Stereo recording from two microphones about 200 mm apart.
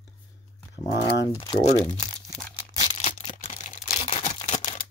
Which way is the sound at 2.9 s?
35° left (ahead or behind).